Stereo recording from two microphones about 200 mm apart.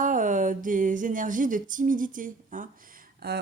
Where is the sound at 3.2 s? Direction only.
50° right (ahead or behind).